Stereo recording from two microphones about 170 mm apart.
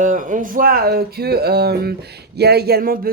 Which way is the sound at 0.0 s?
50° right (ahead or behind).